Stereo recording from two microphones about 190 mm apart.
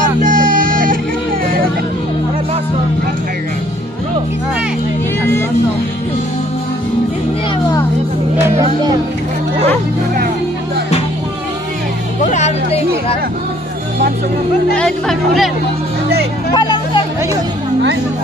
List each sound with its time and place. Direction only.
0.2 s music: 45° right (ahead or behind)
12.2 s music: 40° left (ahead or behind)
14.8 s music: 5° left (ahead or behind)
16.5 s music: 25° left (ahead or behind)